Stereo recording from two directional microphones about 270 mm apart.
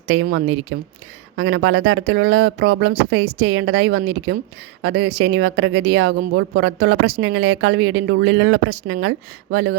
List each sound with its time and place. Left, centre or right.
0.1 s speech: right